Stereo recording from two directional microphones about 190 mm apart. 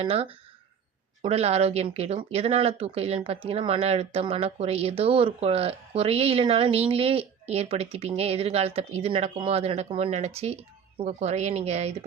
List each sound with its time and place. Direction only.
0.0 s speech: 30° right (ahead or behind)